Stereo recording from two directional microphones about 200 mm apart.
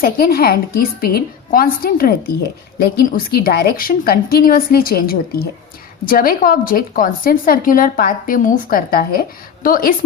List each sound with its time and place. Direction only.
0.0 s a woman's voice: 50° left (ahead or behind)